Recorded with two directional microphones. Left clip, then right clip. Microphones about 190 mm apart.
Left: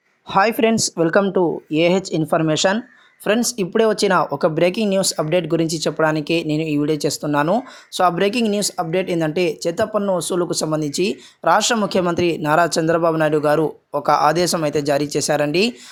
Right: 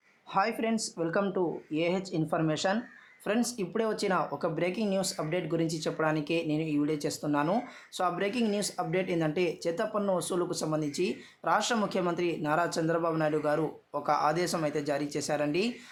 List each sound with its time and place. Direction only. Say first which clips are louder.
0.3 s speech: left 13 dB; 40° left (ahead or behind)